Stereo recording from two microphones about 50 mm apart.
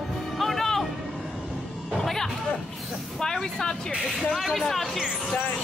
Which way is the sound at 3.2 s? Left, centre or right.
Centre.